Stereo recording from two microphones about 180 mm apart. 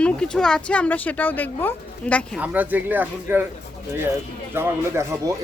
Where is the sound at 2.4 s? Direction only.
10° right (ahead or behind).